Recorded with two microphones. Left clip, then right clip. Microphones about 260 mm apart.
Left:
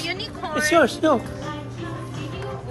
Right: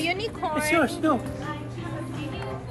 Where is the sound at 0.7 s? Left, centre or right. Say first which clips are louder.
Left 6 dB; left.